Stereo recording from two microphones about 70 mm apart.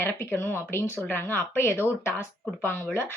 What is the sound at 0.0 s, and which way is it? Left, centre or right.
Speech, left.